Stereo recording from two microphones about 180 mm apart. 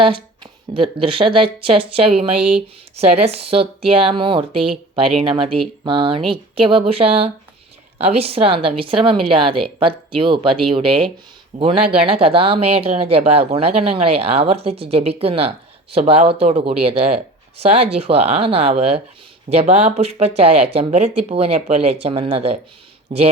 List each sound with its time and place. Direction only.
0.7 s speech: 30° right (ahead or behind)